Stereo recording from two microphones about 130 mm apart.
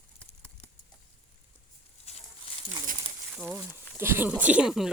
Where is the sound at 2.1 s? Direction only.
50° left (ahead or behind).